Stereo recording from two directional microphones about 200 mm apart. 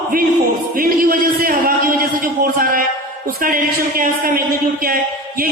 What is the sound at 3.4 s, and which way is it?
A man's voice, 45° right (ahead or behind).